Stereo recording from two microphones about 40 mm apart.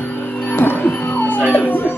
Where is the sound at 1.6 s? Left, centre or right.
Left.